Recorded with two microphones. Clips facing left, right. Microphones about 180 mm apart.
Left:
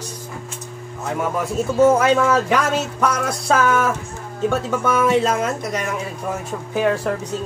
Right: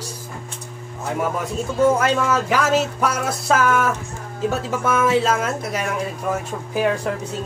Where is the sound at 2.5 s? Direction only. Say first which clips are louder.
Right 1 dB; 5° right (ahead or behind).